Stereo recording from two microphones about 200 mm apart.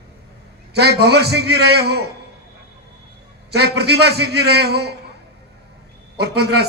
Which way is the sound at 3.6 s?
55° right (ahead or behind).